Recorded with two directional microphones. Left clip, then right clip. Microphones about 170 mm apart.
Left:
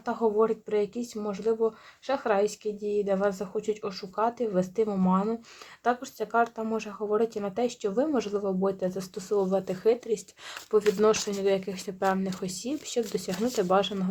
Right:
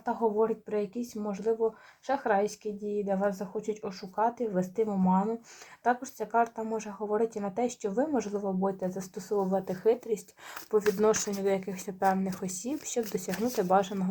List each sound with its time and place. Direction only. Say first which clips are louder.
0.0 s speech: left 2 dB; 30° left (ahead or behind); by 14.1 s 15° left (ahead or behind)